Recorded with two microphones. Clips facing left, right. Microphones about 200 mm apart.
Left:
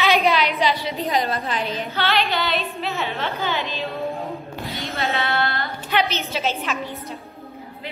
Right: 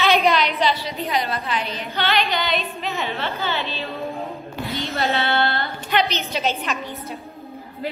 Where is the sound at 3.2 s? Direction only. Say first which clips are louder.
Left 1 dB; 15° left (ahead or behind).